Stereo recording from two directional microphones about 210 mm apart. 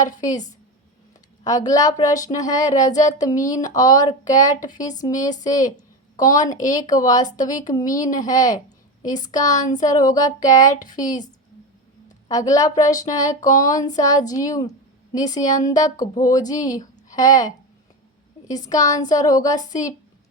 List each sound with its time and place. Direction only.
0.2 s speech: 15° left (ahead or behind)
12.0 s a sound: 15° left (ahead or behind)
12.8 s speech: 15° left (ahead or behind)